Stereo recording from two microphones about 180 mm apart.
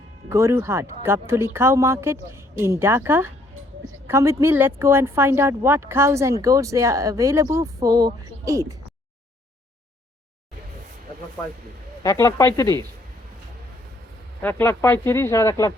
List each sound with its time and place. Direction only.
0.3 s a woman's voice: 15° right (ahead or behind)
12.0 s speech: 15° left (ahead or behind)
14.4 s speech: 15° left (ahead or behind)